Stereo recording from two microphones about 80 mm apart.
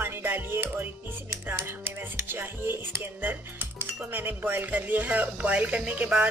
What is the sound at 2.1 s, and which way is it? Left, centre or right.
Speech, right.